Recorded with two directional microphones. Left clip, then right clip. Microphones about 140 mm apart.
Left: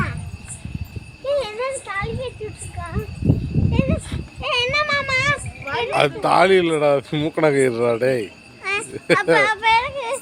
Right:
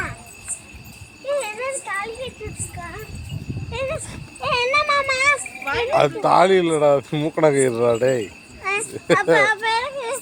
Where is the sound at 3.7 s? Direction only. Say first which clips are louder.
Left 1 dB; 40° right (ahead or behind).